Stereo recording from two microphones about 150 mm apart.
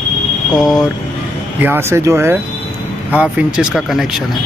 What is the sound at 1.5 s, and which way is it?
Speech, 15° right (ahead or behind).